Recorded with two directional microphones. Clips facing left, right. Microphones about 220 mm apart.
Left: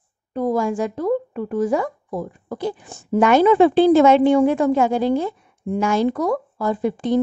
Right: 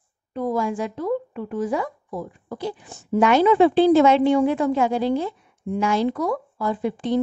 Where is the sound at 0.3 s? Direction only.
45° left (ahead or behind).